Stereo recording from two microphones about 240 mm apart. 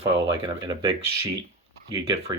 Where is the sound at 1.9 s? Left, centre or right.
Centre.